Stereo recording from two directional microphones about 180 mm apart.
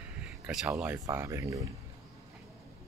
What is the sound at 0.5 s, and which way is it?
Speech, 5° right (ahead or behind).